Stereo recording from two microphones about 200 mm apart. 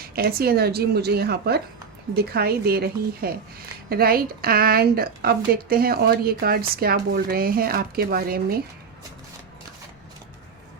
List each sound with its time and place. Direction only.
0.0 s a woman's voice: 50° right (ahead or behind)